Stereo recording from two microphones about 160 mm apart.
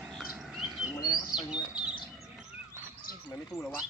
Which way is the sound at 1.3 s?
5° right (ahead or behind).